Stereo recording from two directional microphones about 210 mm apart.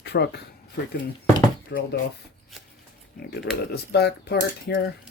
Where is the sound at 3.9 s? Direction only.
50° left (ahead or behind).